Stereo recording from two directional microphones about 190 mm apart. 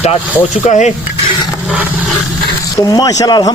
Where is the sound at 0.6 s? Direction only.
40° left (ahead or behind).